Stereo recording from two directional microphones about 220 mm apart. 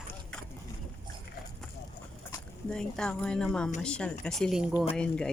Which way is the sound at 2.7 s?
5° left (ahead or behind).